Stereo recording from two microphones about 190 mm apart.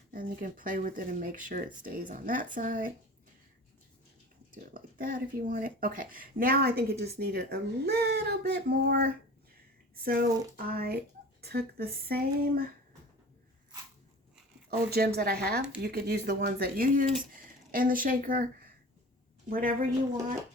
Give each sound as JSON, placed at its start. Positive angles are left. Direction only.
{"t": 0.1, "sound": "speech", "side_deg": -45}
{"t": 4.5, "sound": "speech", "side_deg": -50}
{"t": 14.7, "sound": "speech", "side_deg": -55}
{"t": 19.5, "sound": "speech", "side_deg": -50}